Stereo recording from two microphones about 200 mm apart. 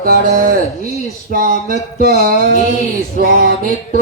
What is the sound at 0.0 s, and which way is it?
Speech, 45° right (ahead or behind).